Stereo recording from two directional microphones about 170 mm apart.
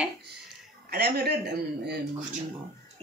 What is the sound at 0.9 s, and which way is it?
Speech, 65° right (ahead or behind).